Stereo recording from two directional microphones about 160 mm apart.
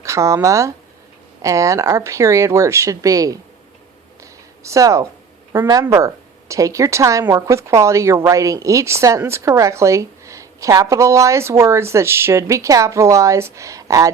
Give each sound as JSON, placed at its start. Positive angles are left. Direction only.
{"t": 0.0, "sound": "a woman's voice", "side_deg": -20}
{"t": 4.2, "sound": "a sound", "side_deg": -20}
{"t": 5.8, "sound": "a woman's voice", "side_deg": -15}